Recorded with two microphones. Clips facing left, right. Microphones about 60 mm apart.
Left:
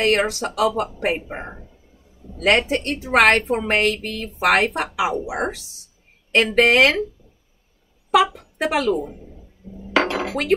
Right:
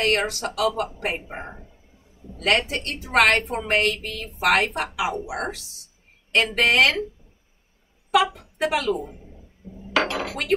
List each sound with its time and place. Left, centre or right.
0.0 s a woman's voice: left
8.1 s a woman's voice: left
9.6 s chink: right
10.0 s dishes: left